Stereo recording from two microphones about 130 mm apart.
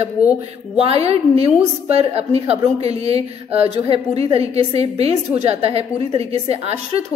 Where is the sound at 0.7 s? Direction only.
50° right (ahead or behind).